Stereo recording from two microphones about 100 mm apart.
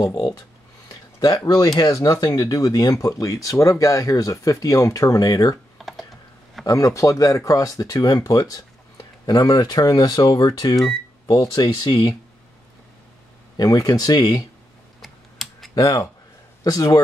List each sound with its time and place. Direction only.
0.0 s speech: 40° left (ahead or behind)
5.8 s typing: centre (ahead or behind)
6.6 s speech: 35° left (ahead or behind)
13.6 s speech: 35° left (ahead or behind)
15.0 s typing: centre (ahead or behind)
15.7 s speech: 40° left (ahead or behind)